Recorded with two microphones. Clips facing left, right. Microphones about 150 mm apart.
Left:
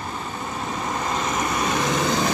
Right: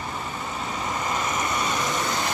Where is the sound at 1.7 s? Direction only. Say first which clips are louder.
Left 4 dB; 90° left.